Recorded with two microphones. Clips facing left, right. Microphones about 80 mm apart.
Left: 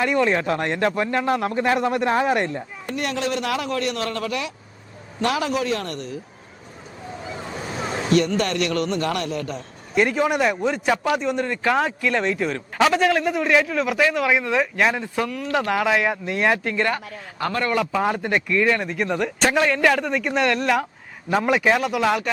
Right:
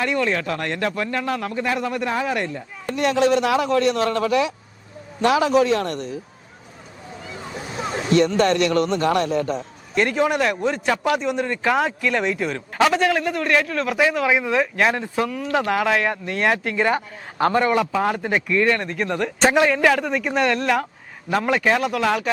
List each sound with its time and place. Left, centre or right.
0.0 s speech: centre
3.0 s a man's voice: right
8.1 s a man's voice: right
9.9 s speech: centre
17.3 s a man's voice: right
17.6 s a man's voice: centre
17.9 s speech: centre
19.4 s speech: centre